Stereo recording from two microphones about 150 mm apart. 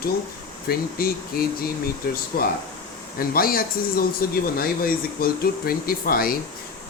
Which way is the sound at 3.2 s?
75° left (ahead or behind).